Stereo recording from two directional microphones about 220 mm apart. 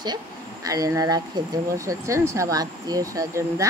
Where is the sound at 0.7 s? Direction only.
15° right (ahead or behind).